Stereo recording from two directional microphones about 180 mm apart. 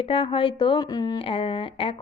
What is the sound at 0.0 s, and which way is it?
A woman's voice, 30° left (ahead or behind).